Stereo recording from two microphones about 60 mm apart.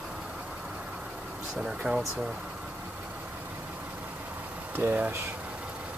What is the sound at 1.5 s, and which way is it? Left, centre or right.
Speech, centre.